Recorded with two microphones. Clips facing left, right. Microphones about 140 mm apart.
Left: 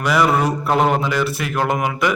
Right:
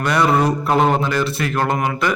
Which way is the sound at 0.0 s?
5° left (ahead or behind).